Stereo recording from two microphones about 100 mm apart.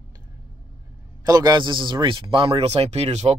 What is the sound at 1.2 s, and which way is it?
Speech, 40° right (ahead or behind).